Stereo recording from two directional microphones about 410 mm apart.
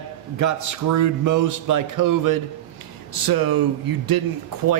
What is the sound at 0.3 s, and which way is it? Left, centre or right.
Speech, right.